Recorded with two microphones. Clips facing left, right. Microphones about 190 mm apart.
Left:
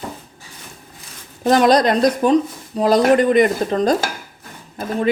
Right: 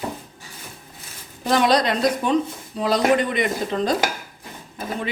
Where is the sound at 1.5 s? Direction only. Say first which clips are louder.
Left 5 dB; 45° left (ahead or behind).